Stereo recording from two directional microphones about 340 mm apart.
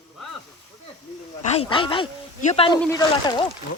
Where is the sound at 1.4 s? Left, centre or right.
Centre.